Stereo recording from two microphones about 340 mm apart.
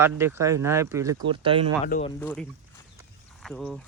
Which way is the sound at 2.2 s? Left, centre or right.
Centre.